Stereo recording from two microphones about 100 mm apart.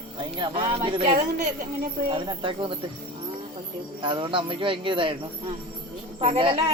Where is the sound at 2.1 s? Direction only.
55° right (ahead or behind).